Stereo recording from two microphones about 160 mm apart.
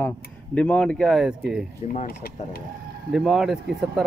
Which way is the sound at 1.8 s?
55° left (ahead or behind).